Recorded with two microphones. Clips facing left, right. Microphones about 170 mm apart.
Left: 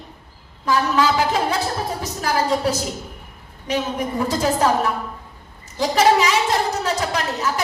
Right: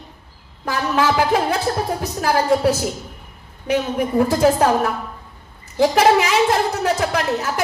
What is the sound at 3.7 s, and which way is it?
A woman's voice, 55° right (ahead or behind).